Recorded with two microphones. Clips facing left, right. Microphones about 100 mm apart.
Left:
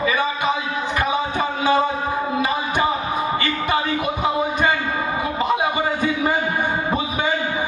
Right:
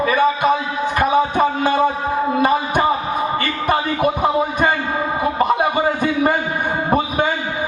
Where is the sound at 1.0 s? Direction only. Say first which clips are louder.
Right 7 dB; 50° right (ahead or behind).